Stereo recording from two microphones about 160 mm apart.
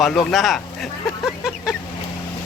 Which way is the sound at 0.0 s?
Centre (ahead or behind).